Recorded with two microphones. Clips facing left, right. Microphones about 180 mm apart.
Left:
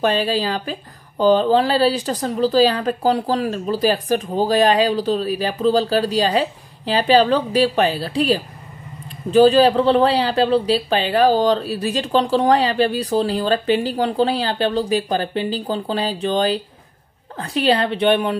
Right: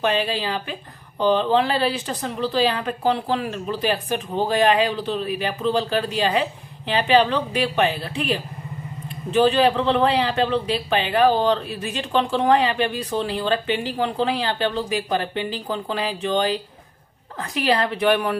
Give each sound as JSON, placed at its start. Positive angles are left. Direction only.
{"t": 0.0, "sound": "a woman's voice", "side_deg": 40}